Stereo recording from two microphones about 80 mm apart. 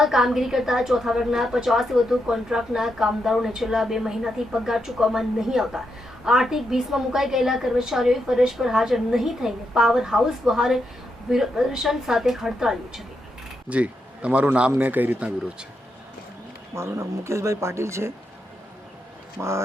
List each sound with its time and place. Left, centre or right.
0.0 s a woman's voice: centre
13.7 s a man's voice: centre
16.7 s speech: right
19.4 s speech: right